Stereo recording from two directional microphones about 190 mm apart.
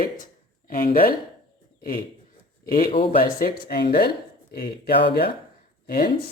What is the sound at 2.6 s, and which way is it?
A man's voice, 55° left (ahead or behind).